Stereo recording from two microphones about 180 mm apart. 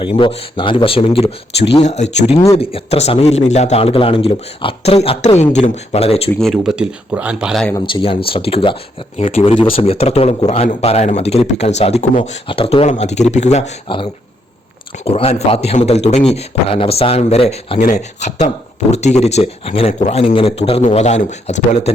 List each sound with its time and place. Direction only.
0.0 s speech: 25° left (ahead or behind)
6.4 s speech: centre (ahead or behind)
7.9 s speech: 30° left (ahead or behind)